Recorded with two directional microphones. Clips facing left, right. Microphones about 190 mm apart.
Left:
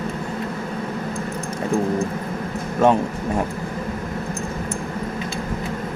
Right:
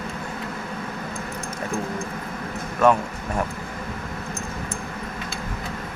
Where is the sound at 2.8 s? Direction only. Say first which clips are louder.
Left 2 dB; 25° left (ahead or behind).